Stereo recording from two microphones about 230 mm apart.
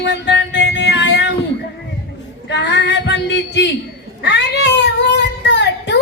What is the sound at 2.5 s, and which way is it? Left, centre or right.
Female singing, left.